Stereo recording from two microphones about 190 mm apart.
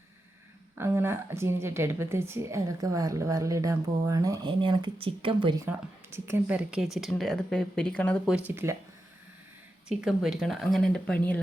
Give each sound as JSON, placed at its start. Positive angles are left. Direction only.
{"t": 0.8, "sound": "a woman's voice", "side_deg": -15}
{"t": 6.1, "sound": "speech", "side_deg": -15}
{"t": 8.4, "sound": "a woman's voice", "side_deg": -10}
{"t": 9.9, "sound": "speech", "side_deg": 0}